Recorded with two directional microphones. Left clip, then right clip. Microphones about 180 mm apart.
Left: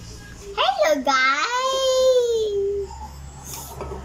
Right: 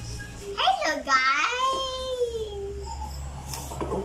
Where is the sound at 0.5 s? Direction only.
50° left (ahead or behind).